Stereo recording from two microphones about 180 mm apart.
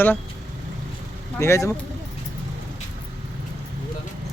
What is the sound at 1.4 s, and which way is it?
Speech, 15° left (ahead or behind).